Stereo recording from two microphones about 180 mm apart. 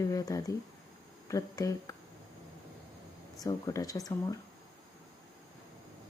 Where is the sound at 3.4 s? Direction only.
20° left (ahead or behind).